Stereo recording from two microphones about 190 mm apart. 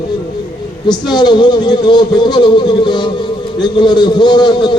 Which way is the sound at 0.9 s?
25° left (ahead or behind).